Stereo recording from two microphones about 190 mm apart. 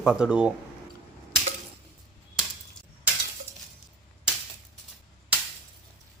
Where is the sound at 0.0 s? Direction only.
5° right (ahead or behind).